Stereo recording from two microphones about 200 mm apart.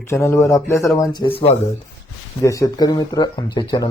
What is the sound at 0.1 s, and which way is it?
A man's voice, 15° left (ahead or behind).